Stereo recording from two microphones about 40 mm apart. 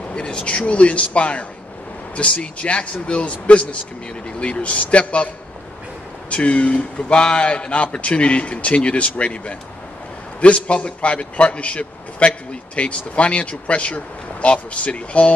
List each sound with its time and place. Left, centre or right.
0.1 s a man's voice: left
6.3 s a man's voice: left